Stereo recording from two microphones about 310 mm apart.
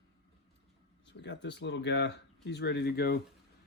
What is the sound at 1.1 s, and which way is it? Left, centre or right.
Speech, left.